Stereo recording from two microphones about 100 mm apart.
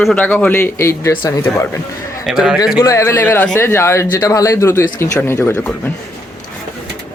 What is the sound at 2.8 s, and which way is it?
Speech, 30° left (ahead or behind).